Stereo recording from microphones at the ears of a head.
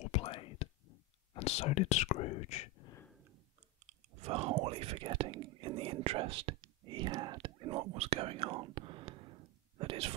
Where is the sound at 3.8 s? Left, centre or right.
Right.